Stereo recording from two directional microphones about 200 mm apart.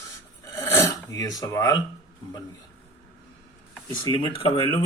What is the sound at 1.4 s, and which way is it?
Speech, 15° left (ahead or behind).